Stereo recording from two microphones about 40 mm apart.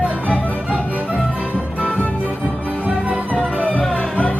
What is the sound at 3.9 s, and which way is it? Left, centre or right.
Music, left.